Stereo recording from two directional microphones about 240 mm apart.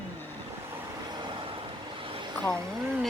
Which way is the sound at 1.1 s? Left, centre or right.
Centre.